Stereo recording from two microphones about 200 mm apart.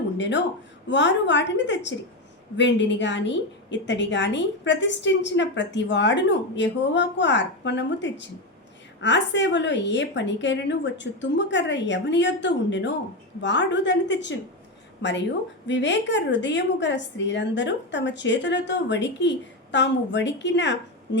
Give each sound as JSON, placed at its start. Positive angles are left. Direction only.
{"t": 0.2, "sound": "a woman's voice", "side_deg": 60}